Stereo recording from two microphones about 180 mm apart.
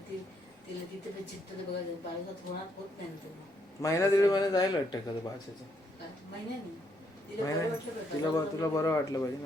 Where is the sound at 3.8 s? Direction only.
20° left (ahead or behind).